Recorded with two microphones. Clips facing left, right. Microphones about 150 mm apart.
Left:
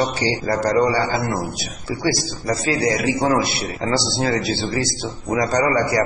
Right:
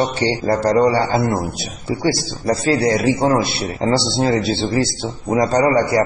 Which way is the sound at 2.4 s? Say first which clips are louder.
Right 4 dB; 30° right (ahead or behind).